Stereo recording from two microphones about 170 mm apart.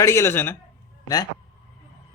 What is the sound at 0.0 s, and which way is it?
A man's voice, 15° left (ahead or behind).